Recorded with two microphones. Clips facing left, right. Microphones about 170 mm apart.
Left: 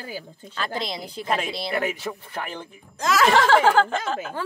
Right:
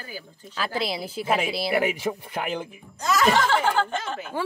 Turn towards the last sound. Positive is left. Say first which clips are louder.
# left 4 dB
turn(degrees=90)